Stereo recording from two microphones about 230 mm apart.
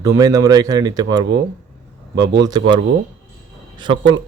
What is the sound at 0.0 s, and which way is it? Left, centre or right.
Speech, centre.